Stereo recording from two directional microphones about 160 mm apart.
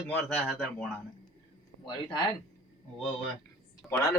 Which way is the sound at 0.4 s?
5° left (ahead or behind).